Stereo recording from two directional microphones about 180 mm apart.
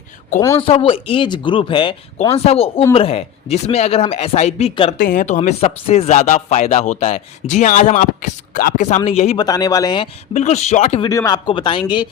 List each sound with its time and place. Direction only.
0.3 s a man's voice: 15° left (ahead or behind)
0.7 s speech: 30° left (ahead or behind)
4.9 s speech: 50° left (ahead or behind)
9.0 s speech: 35° left (ahead or behind)
9.5 s speech: 20° left (ahead or behind)
10.3 s speech: 40° left (ahead or behind)
11.0 s speech: 20° left (ahead or behind)